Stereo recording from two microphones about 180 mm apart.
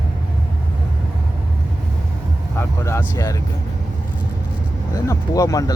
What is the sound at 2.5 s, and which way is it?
Vehicle, 15° left (ahead or behind).